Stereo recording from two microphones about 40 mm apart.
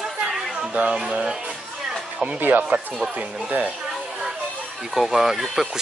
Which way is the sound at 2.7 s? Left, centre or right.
Right.